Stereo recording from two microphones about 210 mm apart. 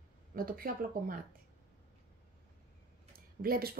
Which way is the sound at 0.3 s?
40° right (ahead or behind).